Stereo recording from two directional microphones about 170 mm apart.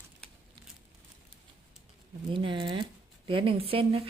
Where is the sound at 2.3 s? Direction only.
30° right (ahead or behind).